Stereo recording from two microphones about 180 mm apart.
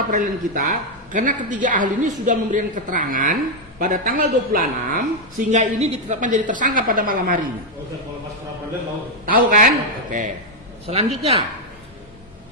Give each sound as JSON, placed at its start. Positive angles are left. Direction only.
{"t": 0.1, "sound": "a woman's voice", "side_deg": -45}
{"t": 9.2, "sound": "a man's voice", "side_deg": -50}
{"t": 10.8, "sound": "a man's voice", "side_deg": -35}